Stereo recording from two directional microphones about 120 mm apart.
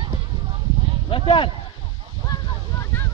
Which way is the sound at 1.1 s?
45° left (ahead or behind).